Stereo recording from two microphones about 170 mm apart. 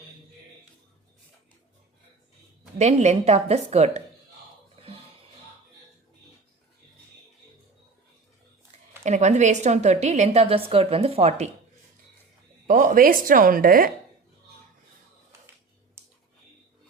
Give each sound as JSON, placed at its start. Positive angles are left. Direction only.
{"t": 2.7, "sound": "a woman's voice", "side_deg": -40}
{"t": 9.0, "sound": "a woman's voice", "side_deg": -45}
{"t": 12.6, "sound": "speech", "side_deg": -55}
{"t": 16.0, "sound": "a sound", "side_deg": -15}